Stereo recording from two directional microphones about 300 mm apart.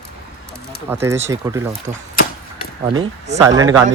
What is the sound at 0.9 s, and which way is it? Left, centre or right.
Speech, centre.